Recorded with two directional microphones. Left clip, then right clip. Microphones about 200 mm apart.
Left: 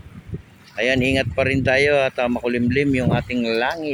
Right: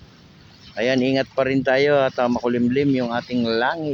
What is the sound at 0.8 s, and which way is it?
Speech, 5° right (ahead or behind).